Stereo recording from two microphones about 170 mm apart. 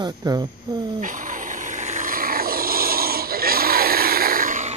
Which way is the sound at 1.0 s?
50° right (ahead or behind).